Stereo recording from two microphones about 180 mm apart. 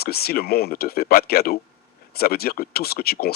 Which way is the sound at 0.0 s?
60° left (ahead or behind).